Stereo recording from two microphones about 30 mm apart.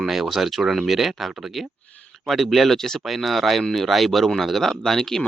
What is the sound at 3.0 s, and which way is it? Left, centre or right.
Speech, centre.